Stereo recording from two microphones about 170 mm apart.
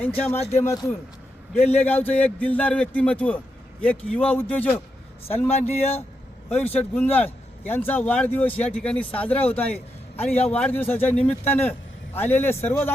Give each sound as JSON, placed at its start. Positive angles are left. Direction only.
{"t": 0.3, "sound": "speech", "side_deg": 40}
{"t": 0.6, "sound": "speech", "side_deg": 15}
{"t": 5.5, "sound": "speech", "side_deg": 40}
{"t": 6.7, "sound": "speech", "side_deg": 10}